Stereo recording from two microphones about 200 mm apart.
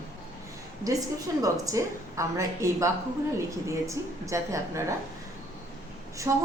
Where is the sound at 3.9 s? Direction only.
15° right (ahead or behind).